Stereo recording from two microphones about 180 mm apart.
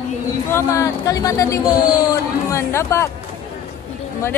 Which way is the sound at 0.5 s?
15° left (ahead or behind).